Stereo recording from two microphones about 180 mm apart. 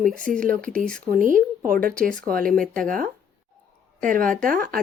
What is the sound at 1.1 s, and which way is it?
Speech, 50° right (ahead or behind).